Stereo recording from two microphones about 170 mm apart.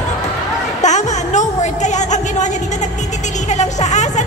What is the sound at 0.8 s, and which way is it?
Music, 45° left (ahead or behind).